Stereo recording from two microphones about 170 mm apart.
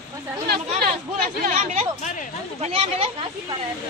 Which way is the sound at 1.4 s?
55° right (ahead or behind).